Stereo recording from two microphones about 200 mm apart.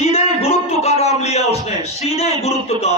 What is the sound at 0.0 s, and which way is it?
Music, 30° left (ahead or behind).